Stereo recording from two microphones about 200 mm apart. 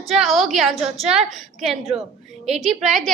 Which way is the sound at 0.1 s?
Centre (ahead or behind).